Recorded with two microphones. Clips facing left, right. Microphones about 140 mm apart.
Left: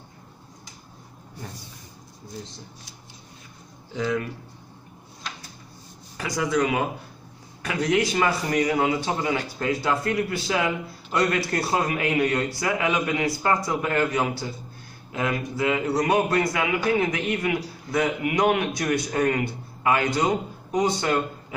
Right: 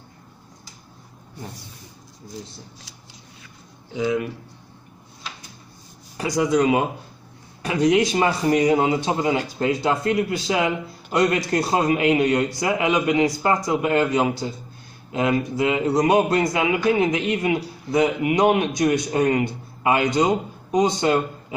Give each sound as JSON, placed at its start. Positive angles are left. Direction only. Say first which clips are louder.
{"t": 3.9, "sound": "speech", "louder": "right 3 dB", "side_deg": -10}
{"t": 6.1, "sound": "speech", "louder": "right 5 dB", "side_deg": -20}